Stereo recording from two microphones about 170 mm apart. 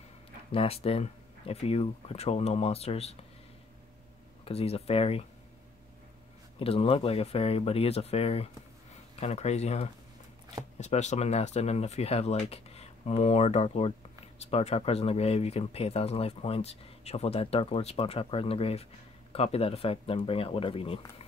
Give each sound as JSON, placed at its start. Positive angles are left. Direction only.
{"t": 0.5, "sound": "speech", "side_deg": 35}
{"t": 4.5, "sound": "speech", "side_deg": 35}
{"t": 6.6, "sound": "speech", "side_deg": 35}